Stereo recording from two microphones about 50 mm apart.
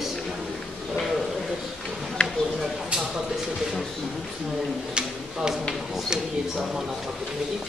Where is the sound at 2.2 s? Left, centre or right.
Centre.